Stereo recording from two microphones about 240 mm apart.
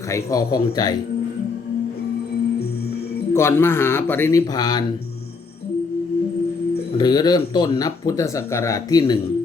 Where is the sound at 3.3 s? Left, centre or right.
Centre.